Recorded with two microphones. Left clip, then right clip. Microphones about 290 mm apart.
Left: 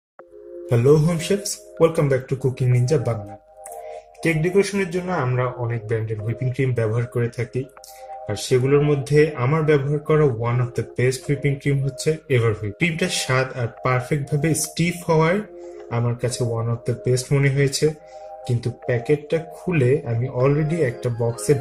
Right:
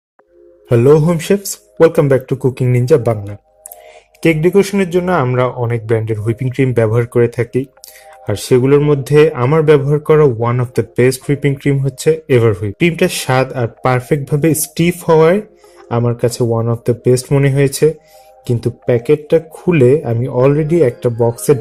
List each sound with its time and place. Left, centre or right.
0.7 s a man's voice: centre
4.2 s a man's voice: centre
8.4 s a man's voice: centre
18.9 s speech: centre